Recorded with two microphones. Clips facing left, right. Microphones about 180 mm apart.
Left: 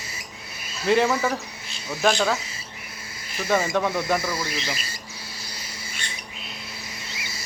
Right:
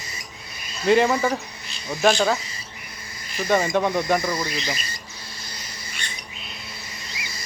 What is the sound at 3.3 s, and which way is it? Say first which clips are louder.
Speech: right 2 dB; 5° left (ahead or behind).